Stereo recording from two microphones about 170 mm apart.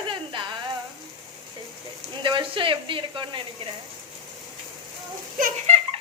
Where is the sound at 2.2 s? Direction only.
30° right (ahead or behind).